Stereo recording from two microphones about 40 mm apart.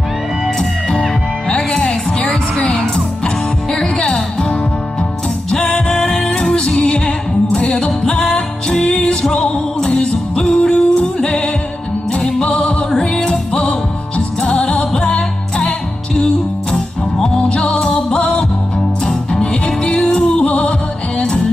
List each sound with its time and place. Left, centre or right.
1.5 s music: left
3.7 s music: centre
17.4 s music: left
19.4 s music: left